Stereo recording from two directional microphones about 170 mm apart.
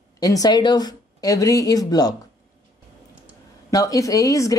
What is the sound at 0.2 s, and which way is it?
Speech, 20° left (ahead or behind).